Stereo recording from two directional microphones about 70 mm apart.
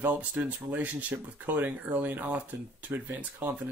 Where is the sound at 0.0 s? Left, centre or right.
Right.